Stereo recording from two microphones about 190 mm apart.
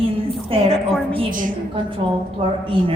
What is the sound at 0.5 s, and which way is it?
Speech, 30° right (ahead or behind).